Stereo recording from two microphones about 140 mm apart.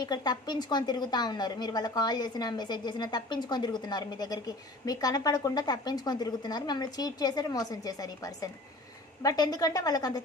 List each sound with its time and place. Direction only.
0.0 s a woman's voice: 30° left (ahead or behind)